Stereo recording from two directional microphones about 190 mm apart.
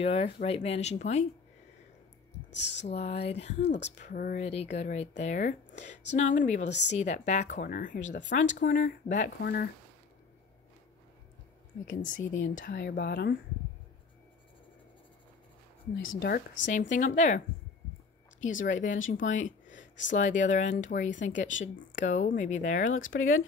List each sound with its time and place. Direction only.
0.0 s speech: 30° left (ahead or behind)
2.9 s speech: 35° left (ahead or behind)
3.6 s speech: 70° left (ahead or behind)
4.0 s speech: 45° left (ahead or behind)
9.4 s speech: 55° left (ahead or behind)
11.8 s speech: 45° left (ahead or behind); by 13.3 s 60° left (ahead or behind)
16.0 s speech: 90° left
16.3 s speech: 55° left (ahead or behind)
18.6 s speech: 40° left (ahead or behind)
21.5 s speech: 85° left
22.0 s speech: 40° left (ahead or behind)
22.9 s speech: 90° left